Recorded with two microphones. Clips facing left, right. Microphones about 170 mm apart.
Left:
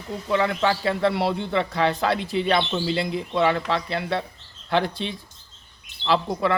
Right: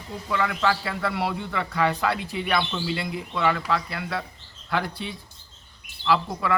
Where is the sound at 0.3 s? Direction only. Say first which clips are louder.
Left 3 dB; 25° left (ahead or behind).